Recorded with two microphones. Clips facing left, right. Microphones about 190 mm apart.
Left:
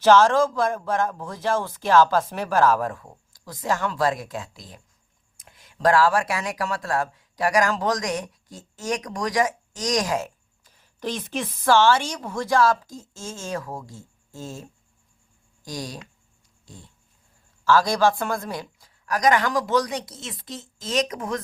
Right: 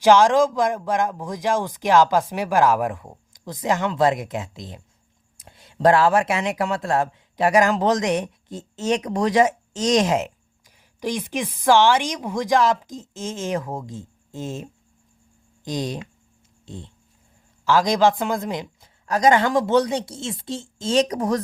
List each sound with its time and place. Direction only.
0.0 s speech: 15° right (ahead or behind); by 21.4 s 35° right (ahead or behind)